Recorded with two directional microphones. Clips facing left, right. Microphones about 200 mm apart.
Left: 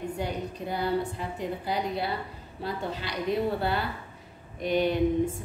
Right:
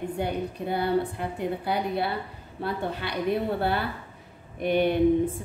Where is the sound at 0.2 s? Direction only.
60° right (ahead or behind).